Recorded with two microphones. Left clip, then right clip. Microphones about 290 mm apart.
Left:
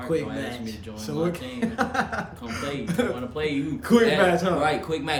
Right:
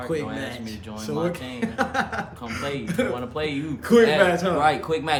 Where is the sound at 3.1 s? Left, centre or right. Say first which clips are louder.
Even; centre.